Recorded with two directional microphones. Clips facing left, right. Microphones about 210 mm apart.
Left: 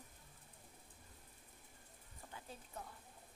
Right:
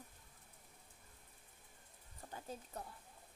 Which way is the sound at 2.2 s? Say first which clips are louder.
Right 4 dB; 40° right (ahead or behind).